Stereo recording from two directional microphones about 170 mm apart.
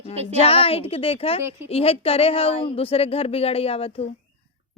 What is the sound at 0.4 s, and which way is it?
A woman's voice, 35° left (ahead or behind).